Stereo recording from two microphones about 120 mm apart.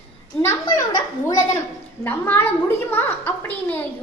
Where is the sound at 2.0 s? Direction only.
15° left (ahead or behind).